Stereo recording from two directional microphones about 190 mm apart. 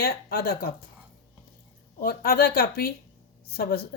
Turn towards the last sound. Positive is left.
turn(degrees=50)  # may be behind; listen again after turning